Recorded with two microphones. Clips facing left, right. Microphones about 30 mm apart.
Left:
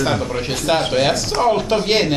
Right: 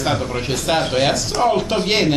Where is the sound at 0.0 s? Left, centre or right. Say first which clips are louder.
Left 1 dB; centre.